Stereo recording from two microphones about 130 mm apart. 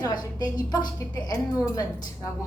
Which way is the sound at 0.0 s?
30° left (ahead or behind).